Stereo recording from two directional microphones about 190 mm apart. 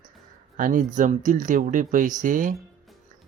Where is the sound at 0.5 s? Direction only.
45° right (ahead or behind).